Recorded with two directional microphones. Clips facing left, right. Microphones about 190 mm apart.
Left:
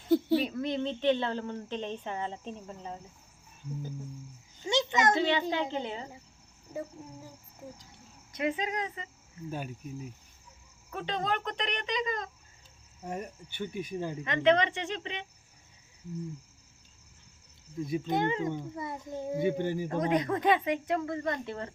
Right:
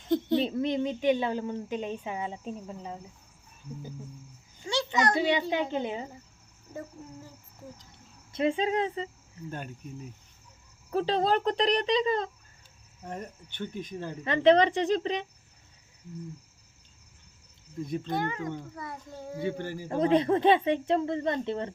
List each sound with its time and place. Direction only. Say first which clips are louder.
0.3 s a woman's voice: right 3 dB; 25° right (ahead or behind); by 3.0 s 5° right (ahead or behind)
4.6 s a child's voice: left 2 dB; 20° left (ahead or behind)
5.2 s a woman's voice: right 2 dB; 15° right (ahead or behind)
6.7 s speech: left 1 dB; 10° left (ahead or behind)
8.3 s speech: right 5 dB; 30° right (ahead or behind)
9.5 s speech: left 2 dB; 5° left (ahead or behind)
10.9 s speech: right 7 dB; 35° right (ahead or behind)
13.0 s speech: left 1 dB; 10° left (ahead or behind)
14.3 s speech: right 5 dB; 35° right (ahead or behind)
17.7 s speech: left 1 dB; 5° left (ahead or behind)
18.1 s a child's voice: left 4 dB; 20° left (ahead or behind)
19.9 s speech: right 8 dB; 30° right (ahead or behind)